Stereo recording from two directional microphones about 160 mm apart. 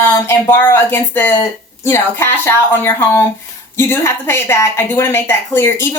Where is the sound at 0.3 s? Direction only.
15° left (ahead or behind).